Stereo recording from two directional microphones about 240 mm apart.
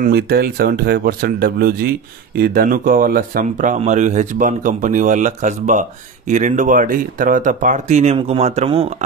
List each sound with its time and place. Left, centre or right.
0.0 s speech: right